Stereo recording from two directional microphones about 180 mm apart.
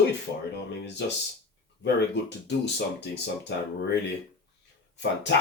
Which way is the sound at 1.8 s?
70° left (ahead or behind).